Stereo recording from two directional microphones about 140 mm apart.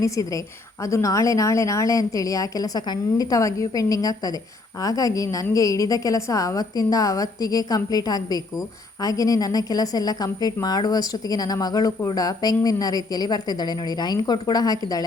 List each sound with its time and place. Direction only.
0.9 s a woman's voice: 20° left (ahead or behind)